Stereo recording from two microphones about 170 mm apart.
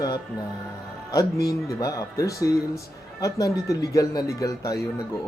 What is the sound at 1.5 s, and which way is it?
Speech, 20° left (ahead or behind).